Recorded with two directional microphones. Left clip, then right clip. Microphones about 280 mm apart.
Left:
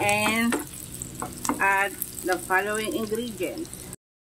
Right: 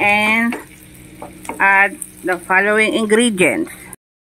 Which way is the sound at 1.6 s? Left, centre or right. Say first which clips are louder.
Right 11 dB; right.